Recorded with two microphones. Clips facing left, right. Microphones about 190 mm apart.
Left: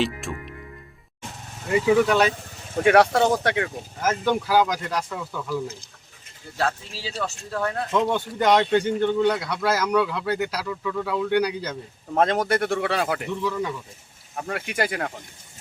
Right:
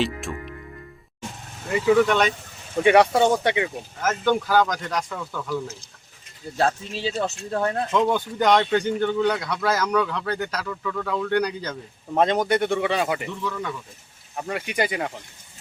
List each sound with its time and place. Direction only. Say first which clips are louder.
0.0 s speech: even; centre (ahead or behind)
2.0 s a man's voice: left 1 dB; 5° left (ahead or behind)
6.6 s speech: right 4 dB; 25° right (ahead or behind)
8.0 s a man's voice: right 1 dB; centre (ahead or behind)